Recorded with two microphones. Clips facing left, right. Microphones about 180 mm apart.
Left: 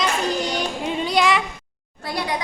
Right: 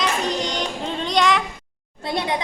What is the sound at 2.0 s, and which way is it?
Speech, 25° right (ahead or behind).